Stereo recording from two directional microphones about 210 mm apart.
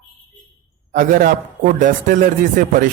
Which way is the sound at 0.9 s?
35° right (ahead or behind).